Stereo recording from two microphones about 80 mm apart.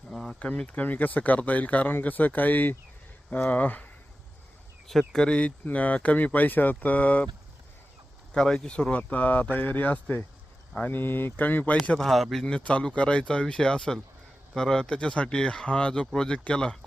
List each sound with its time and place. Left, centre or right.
0.1 s speech: centre
4.9 s speech: centre
8.3 s speech: centre
11.9 s speech: centre